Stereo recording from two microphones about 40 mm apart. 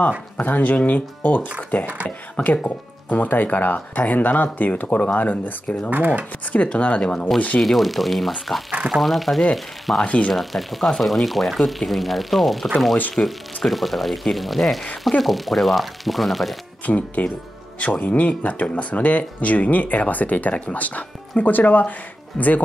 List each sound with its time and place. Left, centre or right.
0.4 s speech: left
5.1 s speech: left
5.9 s speech: right
6.5 s speech: left
7.6 s speech: centre
10.0 s speech: left
10.3 s speech: centre
16.8 s speech: left
22.3 s speech: centre